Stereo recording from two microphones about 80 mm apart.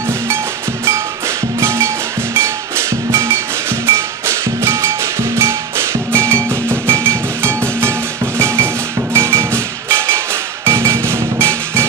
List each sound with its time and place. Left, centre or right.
1.6 s music: right
3.1 s music: right
9.1 s music: right